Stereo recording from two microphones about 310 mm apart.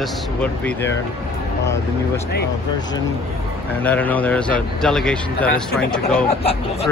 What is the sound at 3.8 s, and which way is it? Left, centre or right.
Speech, centre.